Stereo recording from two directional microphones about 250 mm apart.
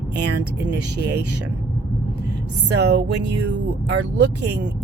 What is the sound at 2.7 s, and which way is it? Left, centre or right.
Speech, right.